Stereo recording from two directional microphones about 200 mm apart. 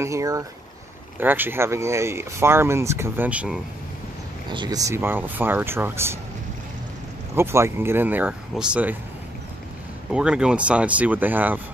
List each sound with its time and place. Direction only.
0.0 s speech: 15° right (ahead or behind)
4.5 s speech: 20° right (ahead or behind)
7.3 s speech: 15° right (ahead or behind)
10.1 s speech: 5° right (ahead or behind)